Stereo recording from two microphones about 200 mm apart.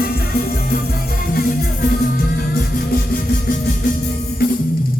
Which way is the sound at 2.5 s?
50° left (ahead or behind).